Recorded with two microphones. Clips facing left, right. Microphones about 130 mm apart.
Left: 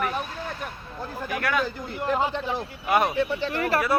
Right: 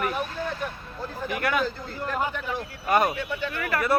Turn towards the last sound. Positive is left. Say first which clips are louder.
# left 4 dB
turn(degrees=30)  # may be behind; listen again after turning